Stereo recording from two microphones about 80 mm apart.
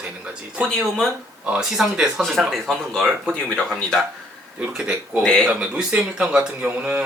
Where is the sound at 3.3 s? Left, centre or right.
Centre.